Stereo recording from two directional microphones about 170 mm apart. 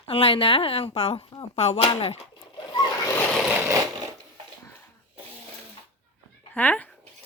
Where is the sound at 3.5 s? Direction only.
15° right (ahead or behind).